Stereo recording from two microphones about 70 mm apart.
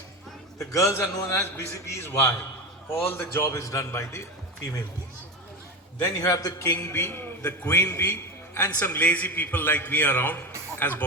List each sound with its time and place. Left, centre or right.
0.6 s a man's voice: left
6.1 s a man's voice: left
6.6 s a man's voice: left